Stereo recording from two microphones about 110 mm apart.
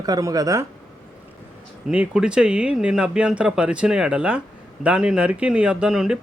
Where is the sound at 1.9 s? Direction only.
10° right (ahead or behind).